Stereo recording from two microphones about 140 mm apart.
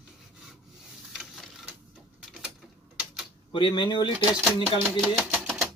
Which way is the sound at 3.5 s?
35° left (ahead or behind).